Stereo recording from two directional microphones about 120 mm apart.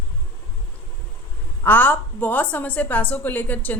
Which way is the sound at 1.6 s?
15° left (ahead or behind).